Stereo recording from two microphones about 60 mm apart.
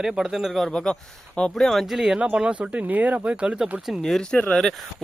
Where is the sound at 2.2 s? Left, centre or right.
Centre.